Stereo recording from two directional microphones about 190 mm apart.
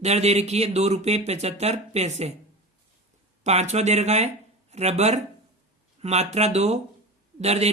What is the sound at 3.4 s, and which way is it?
Speech, 35° right (ahead or behind).